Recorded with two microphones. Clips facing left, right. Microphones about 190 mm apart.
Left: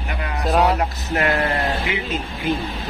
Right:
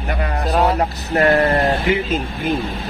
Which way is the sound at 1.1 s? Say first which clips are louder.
Right 6 dB; 35° right (ahead or behind).